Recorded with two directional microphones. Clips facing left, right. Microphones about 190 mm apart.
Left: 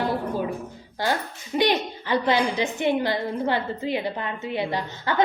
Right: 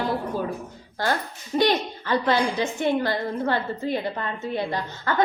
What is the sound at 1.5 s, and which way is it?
A woman's voice, 15° left (ahead or behind).